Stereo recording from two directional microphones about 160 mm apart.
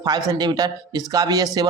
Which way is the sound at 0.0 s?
25° right (ahead or behind).